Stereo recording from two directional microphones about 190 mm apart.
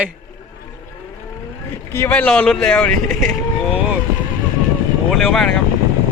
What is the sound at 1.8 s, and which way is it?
Speech, 10° left (ahead or behind).